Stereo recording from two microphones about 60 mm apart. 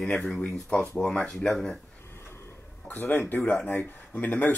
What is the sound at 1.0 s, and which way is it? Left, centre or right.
Speech, centre.